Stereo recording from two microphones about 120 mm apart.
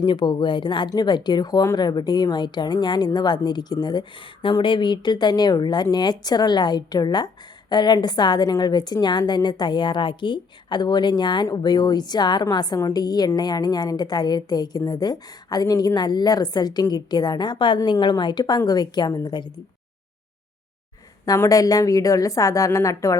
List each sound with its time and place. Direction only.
0.0 s a woman's voice: 40° left (ahead or behind)
21.2 s a woman's voice: 25° left (ahead or behind)